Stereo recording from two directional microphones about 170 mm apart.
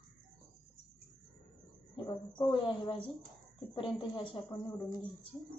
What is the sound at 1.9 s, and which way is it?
A woman's voice, 30° left (ahead or behind).